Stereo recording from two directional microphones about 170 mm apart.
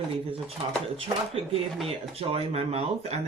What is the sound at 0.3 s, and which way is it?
Speech, 35° right (ahead or behind).